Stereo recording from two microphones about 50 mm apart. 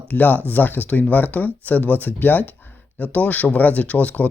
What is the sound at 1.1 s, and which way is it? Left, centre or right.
Speech, left.